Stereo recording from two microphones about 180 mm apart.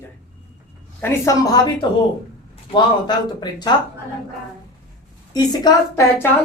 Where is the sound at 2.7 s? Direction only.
25° left (ahead or behind).